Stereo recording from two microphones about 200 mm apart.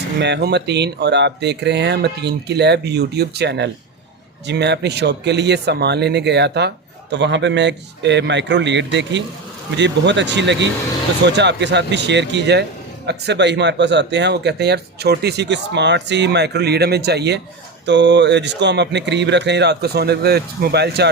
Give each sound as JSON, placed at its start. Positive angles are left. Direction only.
{"t": 0.2, "sound": "speech", "side_deg": -60}